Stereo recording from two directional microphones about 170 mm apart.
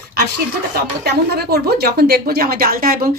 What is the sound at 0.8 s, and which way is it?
Speech, 70° right (ahead or behind).